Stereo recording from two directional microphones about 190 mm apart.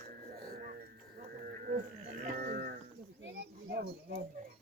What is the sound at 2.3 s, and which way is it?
Livestock, 50° right (ahead or behind).